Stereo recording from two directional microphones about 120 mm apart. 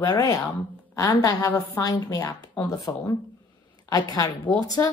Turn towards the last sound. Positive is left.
turn(degrees=35)  # may be behind; listen again after turning